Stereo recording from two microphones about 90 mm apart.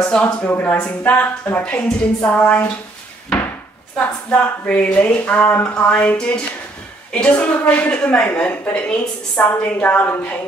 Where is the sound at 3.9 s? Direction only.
15° left (ahead or behind).